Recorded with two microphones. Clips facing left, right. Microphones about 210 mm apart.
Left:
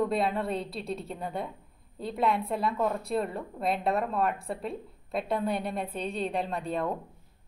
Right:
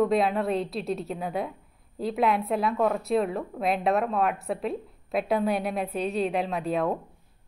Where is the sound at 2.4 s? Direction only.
60° right (ahead or behind).